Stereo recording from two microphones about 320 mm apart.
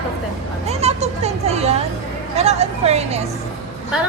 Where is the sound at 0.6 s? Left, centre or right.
Centre.